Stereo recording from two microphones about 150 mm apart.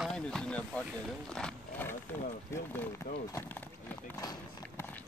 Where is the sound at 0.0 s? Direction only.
5° left (ahead or behind).